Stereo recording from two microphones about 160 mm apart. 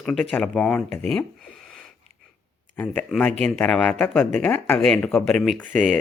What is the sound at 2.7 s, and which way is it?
Speech, 10° left (ahead or behind).